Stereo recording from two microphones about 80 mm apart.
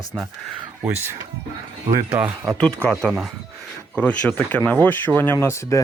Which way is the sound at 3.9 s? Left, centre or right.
Centre.